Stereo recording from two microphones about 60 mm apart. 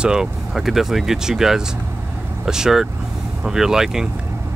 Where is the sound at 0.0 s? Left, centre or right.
Centre.